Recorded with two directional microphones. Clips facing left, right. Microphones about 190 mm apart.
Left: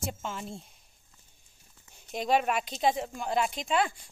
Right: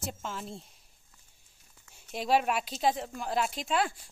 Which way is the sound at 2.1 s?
5° right (ahead or behind).